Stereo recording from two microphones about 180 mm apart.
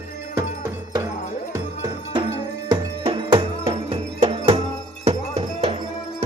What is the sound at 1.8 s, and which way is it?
Music, 25° right (ahead or behind).